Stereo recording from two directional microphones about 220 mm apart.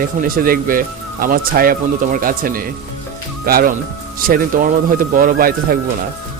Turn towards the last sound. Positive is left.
turn(degrees=-40)  # may be behind; listen again after turning